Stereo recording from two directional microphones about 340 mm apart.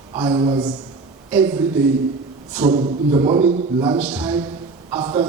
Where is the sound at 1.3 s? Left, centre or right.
Centre.